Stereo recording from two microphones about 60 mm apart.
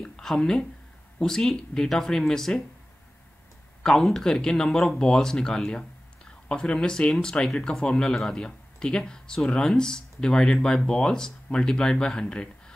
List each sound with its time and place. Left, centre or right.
0.0 s speech: centre
3.8 s speech: centre